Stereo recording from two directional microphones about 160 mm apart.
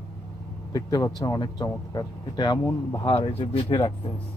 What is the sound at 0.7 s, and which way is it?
Speech, 25° left (ahead or behind).